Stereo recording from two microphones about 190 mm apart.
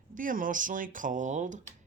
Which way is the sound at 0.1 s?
45° right (ahead or behind).